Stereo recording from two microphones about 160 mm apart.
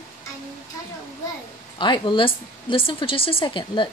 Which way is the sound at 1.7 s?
30° left (ahead or behind).